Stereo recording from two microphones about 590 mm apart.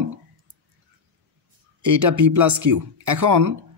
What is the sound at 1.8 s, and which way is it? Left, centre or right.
Speech, right.